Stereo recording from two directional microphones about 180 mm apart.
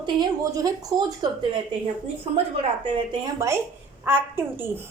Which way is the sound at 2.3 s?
35° right (ahead or behind).